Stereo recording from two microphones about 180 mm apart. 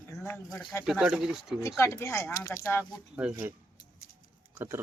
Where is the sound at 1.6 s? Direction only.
15° left (ahead or behind).